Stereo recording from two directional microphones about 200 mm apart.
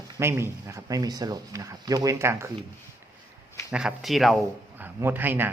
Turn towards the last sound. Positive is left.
turn(degrees=-10)  # may be behind; listen again after turning